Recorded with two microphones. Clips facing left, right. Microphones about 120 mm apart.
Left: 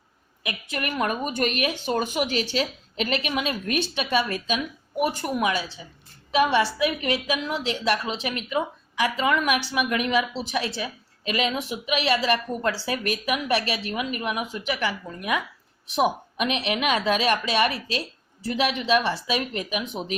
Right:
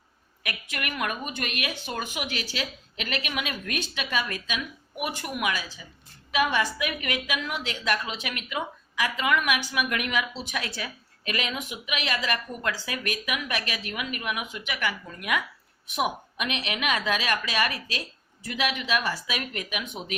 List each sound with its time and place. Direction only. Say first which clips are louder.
0.4 s a woman's voice: left 4 dB; 30° left (ahead or behind)